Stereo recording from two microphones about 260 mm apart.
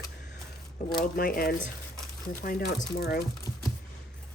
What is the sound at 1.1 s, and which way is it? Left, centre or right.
Speech, left.